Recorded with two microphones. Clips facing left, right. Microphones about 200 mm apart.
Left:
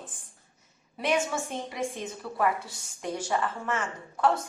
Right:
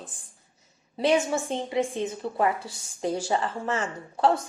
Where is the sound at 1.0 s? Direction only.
30° right (ahead or behind).